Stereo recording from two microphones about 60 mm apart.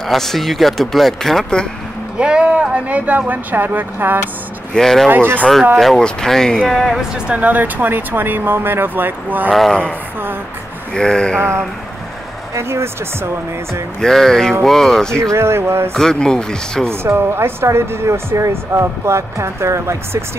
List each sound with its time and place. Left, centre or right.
0.0 s speech: centre
2.1 s speech: centre; by 4.3 s right
4.7 s speech: centre
5.1 s speech: right
5.8 s speech: centre
7.2 s speech: right
9.5 s speech: centre
11.0 s speech: centre
12.5 s speech: right
14.0 s speech: centre
15.3 s speech: right
15.9 s speech: centre
16.9 s speech: right